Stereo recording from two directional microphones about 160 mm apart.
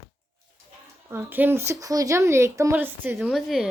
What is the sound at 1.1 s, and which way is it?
Speech, 10° right (ahead or behind).